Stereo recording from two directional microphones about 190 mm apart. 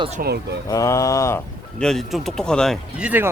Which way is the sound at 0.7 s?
15° left (ahead or behind).